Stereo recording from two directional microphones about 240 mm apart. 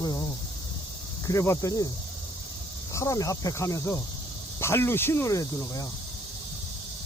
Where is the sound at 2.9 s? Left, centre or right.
Centre.